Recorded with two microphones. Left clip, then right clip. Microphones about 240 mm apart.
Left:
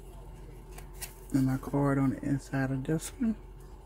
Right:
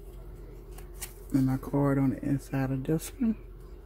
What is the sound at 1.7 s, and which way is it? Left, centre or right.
Speech, centre.